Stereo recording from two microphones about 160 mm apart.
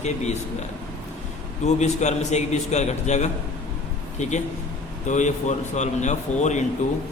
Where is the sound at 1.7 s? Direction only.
45° left (ahead or behind).